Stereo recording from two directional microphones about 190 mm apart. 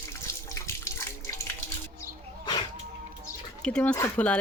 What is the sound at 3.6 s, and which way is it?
Speech, 5° left (ahead or behind).